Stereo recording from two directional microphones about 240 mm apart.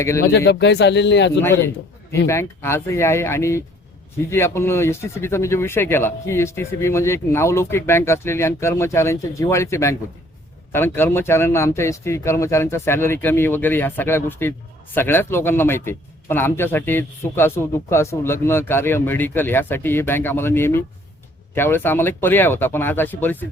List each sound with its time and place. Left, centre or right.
0.0 s a man's voice: centre
0.3 s speech: left
1.4 s a man's voice: centre